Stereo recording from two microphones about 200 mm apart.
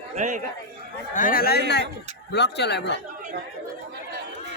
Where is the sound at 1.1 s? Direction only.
45° left (ahead or behind).